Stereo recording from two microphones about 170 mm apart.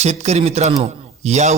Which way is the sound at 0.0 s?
40° right (ahead or behind).